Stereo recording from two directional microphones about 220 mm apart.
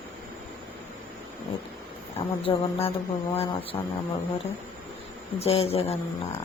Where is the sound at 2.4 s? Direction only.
25° left (ahead or behind).